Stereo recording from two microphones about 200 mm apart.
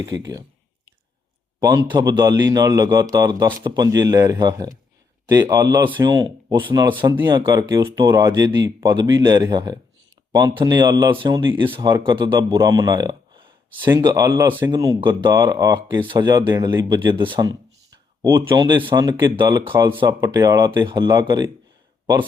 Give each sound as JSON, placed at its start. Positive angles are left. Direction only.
{"t": 1.5, "sound": "a man's voice", "side_deg": -15}